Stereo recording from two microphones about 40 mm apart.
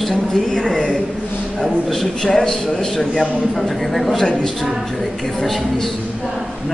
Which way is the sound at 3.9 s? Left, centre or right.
Centre.